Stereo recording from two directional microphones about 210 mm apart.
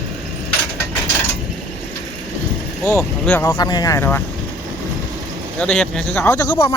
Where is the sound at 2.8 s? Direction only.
15° left (ahead or behind).